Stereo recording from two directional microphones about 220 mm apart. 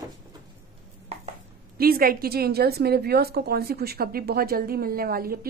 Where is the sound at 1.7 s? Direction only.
40° right (ahead or behind).